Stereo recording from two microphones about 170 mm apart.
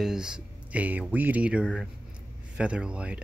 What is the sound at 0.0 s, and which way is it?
Speech, 5° right (ahead or behind).